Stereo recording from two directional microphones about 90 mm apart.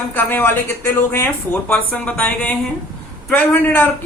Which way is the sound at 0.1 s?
20° left (ahead or behind).